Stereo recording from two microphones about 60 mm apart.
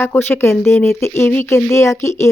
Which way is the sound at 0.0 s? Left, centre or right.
Left.